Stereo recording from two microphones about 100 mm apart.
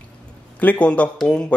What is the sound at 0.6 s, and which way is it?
Speech, 15° left (ahead or behind).